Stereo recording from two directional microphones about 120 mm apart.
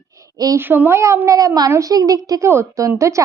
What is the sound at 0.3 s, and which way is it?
Speech, 30° right (ahead or behind).